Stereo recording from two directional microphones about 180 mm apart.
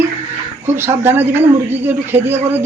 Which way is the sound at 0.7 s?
15° right (ahead or behind).